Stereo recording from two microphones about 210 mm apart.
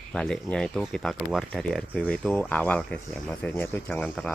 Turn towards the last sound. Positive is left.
turn(degrees=5)  # may be behind; listen again after turning